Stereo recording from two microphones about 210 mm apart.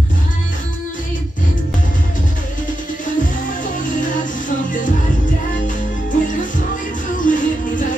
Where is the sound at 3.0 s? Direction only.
40° left (ahead or behind).